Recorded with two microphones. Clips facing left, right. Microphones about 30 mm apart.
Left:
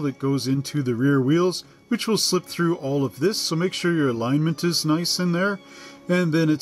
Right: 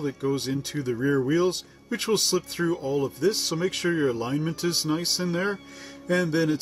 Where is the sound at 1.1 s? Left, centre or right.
Left.